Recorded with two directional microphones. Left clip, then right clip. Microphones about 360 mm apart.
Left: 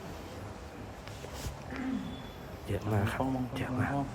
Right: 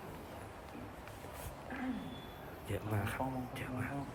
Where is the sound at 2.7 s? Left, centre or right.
Centre.